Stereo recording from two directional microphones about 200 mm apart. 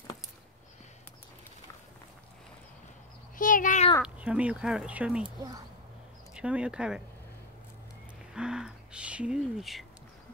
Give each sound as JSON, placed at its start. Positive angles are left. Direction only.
{"t": 3.3, "sound": "a sound", "side_deg": 40}
{"t": 4.0, "sound": "speech", "side_deg": -5}
{"t": 5.2, "sound": "speech", "side_deg": -20}
{"t": 6.3, "sound": "speech", "side_deg": -5}
{"t": 8.3, "sound": "speech", "side_deg": -5}